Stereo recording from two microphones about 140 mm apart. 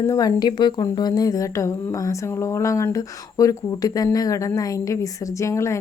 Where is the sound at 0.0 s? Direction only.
25° left (ahead or behind).